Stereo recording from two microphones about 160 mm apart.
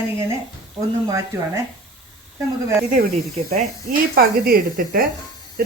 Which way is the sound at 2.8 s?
60° right (ahead or behind).